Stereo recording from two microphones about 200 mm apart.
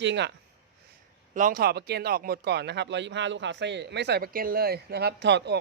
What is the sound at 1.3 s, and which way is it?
Speech, 45° right (ahead or behind).